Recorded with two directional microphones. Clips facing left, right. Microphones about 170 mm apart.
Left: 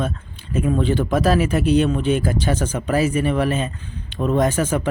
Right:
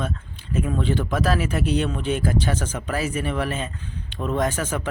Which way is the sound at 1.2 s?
10° left (ahead or behind).